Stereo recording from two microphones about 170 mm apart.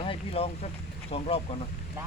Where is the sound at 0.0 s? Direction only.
35° left (ahead or behind).